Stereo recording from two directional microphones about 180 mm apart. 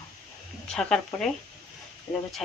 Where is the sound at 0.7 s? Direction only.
Centre (ahead or behind).